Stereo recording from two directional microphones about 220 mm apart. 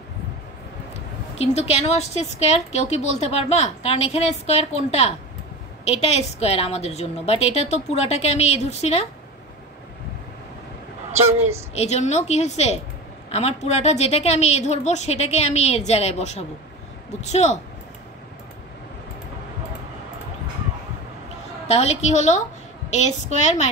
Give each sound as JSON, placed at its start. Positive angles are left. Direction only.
{"t": 0.9, "sound": "a woman's voice", "side_deg": 30}
{"t": 11.7, "sound": "a woman's voice", "side_deg": 30}
{"t": 21.6, "sound": "a woman's voice", "side_deg": 30}